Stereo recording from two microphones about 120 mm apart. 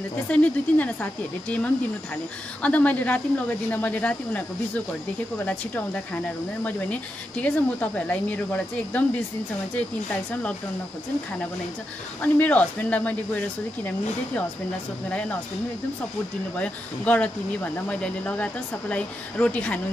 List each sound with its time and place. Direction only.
0.3 s speech: 10° left (ahead or behind)
2.6 s speech: 10° left (ahead or behind)
12.2 s speech: 10° left (ahead or behind)
15.0 s speech: 10° left (ahead or behind)
16.5 s speech: 10° left (ahead or behind)